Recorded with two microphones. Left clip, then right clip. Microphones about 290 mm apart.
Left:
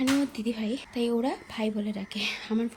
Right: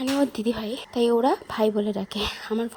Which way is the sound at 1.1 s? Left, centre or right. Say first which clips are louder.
Right 10 dB; right.